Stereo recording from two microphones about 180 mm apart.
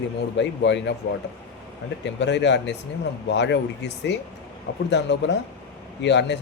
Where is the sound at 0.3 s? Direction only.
80° left.